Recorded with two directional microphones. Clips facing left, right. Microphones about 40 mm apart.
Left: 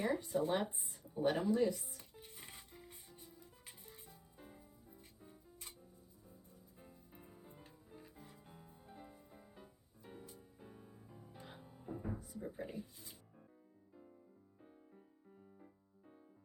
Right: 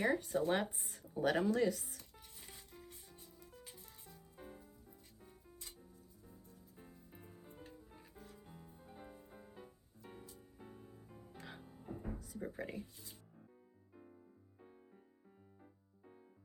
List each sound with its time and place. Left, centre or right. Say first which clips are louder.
0.0 s speech: right 2 dB; right
2.0 s music: left 2 dB; left
3.1 s music: even; centre
4.4 s music: right 5 dB; centre
4.6 s music: even; centre
6.7 s music: right 1 dB; centre
9.0 s music: right 4 dB; centre
11.3 s music: right 3 dB; right
11.6 s music: right 1 dB; centre
12.2 s speech: right 1 dB; right
14.6 s music: right 1 dB; centre